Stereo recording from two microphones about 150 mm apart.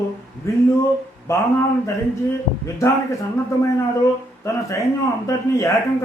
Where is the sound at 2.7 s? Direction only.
20° left (ahead or behind).